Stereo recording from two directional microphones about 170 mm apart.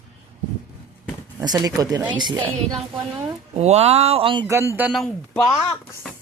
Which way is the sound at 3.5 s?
40° right (ahead or behind).